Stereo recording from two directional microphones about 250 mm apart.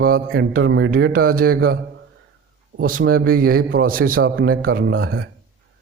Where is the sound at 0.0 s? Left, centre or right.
Right.